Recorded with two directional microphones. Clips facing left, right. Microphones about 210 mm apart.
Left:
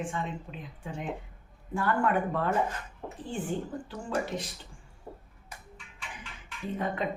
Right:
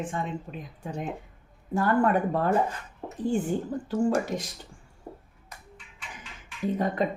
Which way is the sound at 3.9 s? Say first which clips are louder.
Right 9 dB; 45° right (ahead or behind).